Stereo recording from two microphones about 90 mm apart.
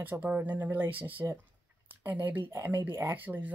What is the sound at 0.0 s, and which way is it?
Speech, 20° right (ahead or behind).